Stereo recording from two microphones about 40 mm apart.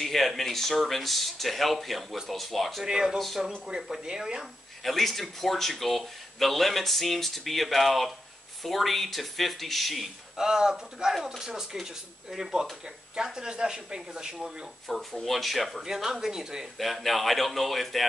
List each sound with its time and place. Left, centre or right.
0.0 s speech: centre
2.8 s speech: centre
4.8 s speech: centre
10.3 s speech: centre
14.9 s speech: centre
15.8 s speech: centre
16.7 s speech: centre